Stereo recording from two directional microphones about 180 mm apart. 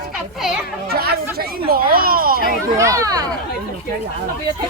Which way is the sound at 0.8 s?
60° right (ahead or behind).